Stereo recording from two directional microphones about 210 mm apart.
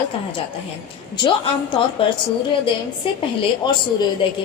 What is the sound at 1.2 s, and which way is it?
Speech, 20° left (ahead or behind).